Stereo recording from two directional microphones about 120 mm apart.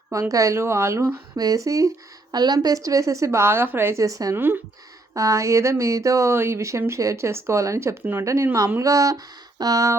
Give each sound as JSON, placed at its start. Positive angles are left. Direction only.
{"t": 0.1, "sound": "speech", "side_deg": -30}
{"t": 4.4, "sound": "speech", "side_deg": -15}